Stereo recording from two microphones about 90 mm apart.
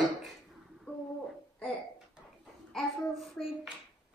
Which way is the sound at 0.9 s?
15° left (ahead or behind).